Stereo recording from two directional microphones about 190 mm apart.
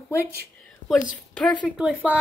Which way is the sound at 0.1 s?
15° left (ahead or behind).